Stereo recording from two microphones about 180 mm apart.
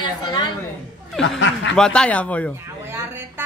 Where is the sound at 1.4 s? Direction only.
90° left.